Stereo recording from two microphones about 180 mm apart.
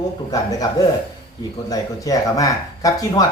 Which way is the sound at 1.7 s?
20° left (ahead or behind).